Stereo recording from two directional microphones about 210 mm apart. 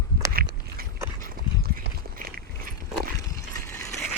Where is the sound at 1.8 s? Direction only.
45° right (ahead or behind).